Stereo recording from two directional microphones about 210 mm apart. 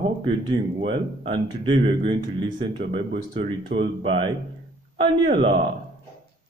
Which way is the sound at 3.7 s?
65° right (ahead or behind).